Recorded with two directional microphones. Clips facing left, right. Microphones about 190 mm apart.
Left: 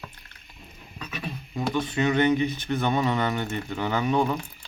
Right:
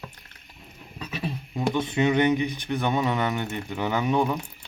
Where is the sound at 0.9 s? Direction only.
30° right (ahead or behind).